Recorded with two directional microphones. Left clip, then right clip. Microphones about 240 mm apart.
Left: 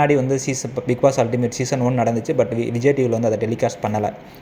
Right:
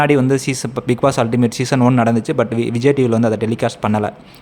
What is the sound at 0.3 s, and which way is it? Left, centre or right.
Speech, right.